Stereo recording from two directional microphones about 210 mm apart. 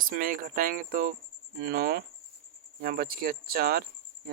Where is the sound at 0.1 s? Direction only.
40° right (ahead or behind).